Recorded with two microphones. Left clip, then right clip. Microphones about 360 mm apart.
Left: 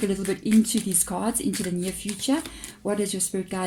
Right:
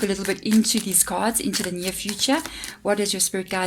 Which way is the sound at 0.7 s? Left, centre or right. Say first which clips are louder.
Right 4 dB; right.